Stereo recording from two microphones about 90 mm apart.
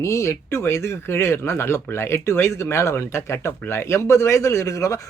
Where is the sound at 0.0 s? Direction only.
30° left (ahead or behind).